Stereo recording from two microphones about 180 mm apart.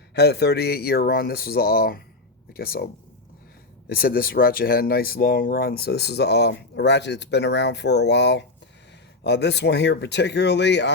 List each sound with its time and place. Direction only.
0.1 s speech: 65° left (ahead or behind)
3.8 s speech: 55° left (ahead or behind); by 10.9 s 75° left (ahead or behind)